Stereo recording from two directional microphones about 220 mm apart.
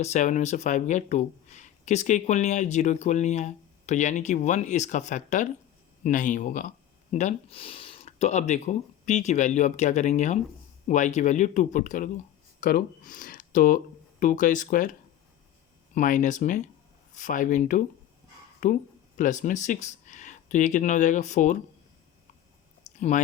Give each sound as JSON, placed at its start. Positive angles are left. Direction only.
{"t": 0.0, "sound": "speech", "side_deg": 35}
{"t": 16.0, "sound": "speech", "side_deg": 35}
{"t": 23.0, "sound": "speech", "side_deg": 30}